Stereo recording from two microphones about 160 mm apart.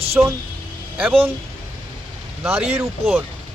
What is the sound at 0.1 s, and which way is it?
Speech, 15° right (ahead or behind).